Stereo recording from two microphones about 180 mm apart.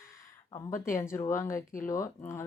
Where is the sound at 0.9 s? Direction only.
15° left (ahead or behind).